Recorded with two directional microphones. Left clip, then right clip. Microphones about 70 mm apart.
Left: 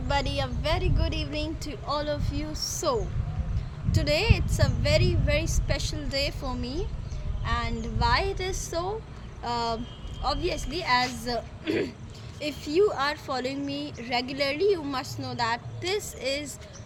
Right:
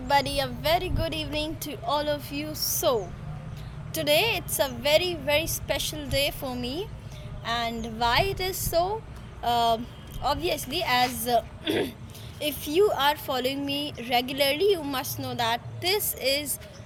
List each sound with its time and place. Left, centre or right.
0.1 s a woman's voice: left
12.4 s a woman's voice: left
15.2 s a woman's voice: left